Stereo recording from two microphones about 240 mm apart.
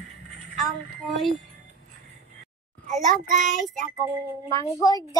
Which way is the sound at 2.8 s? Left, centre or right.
Right.